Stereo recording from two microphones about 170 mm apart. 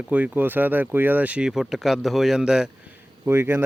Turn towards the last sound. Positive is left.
turn(degrees=-15)  # may be behind; listen again after turning